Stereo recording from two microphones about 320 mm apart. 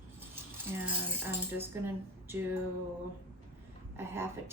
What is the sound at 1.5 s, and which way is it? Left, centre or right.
Speech, centre.